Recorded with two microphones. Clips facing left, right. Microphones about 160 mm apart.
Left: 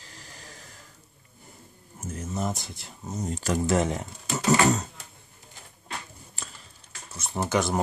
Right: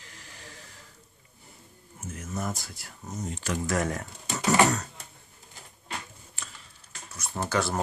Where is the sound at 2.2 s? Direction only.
20° left (ahead or behind).